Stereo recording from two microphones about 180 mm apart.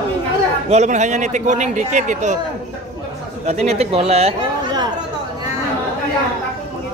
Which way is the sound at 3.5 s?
35° right (ahead or behind).